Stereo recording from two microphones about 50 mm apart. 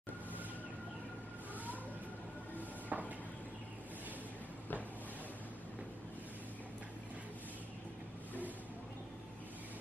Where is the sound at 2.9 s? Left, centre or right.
Right.